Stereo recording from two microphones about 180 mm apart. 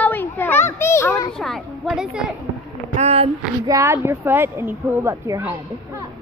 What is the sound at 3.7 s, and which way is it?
Speech, 15° right (ahead or behind).